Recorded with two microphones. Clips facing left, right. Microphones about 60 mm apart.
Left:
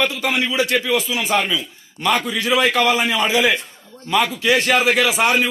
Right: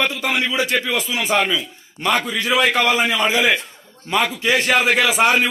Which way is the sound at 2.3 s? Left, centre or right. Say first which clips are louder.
Even; centre.